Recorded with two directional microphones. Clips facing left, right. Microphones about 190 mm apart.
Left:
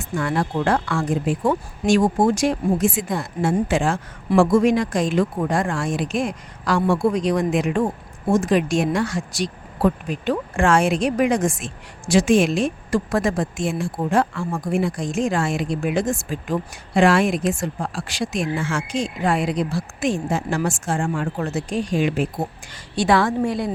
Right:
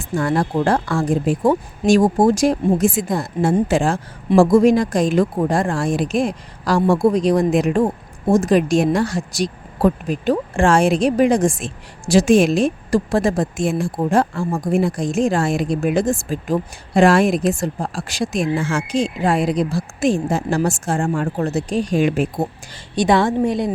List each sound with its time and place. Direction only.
0.2 s speech: 40° right (ahead or behind)
23.0 s a woman's voice: 20° right (ahead or behind)